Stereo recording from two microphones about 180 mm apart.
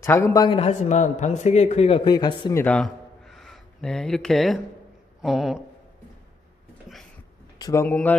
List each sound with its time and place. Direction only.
0.0 s speech: 15° left (ahead or behind)
0.6 s a man's voice: 40° left (ahead or behind)
2.5 s a sound: 5° left (ahead or behind)
5.2 s speech: centre (ahead or behind)
7.5 s speech: 20° left (ahead or behind)